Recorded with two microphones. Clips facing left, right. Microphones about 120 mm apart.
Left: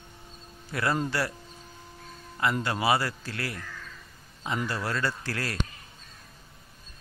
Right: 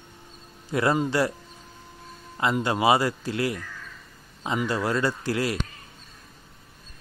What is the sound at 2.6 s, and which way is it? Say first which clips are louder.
Speech: right 8 dB; 20° right (ahead or behind).